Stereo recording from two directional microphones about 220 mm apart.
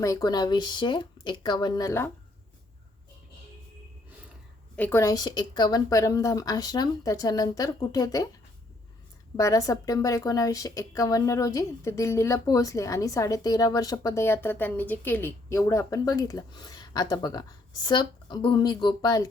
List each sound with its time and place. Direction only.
0.0 s speech: 15° left (ahead or behind)
4.8 s speech: 10° left (ahead or behind)
9.3 s speech: 15° left (ahead or behind)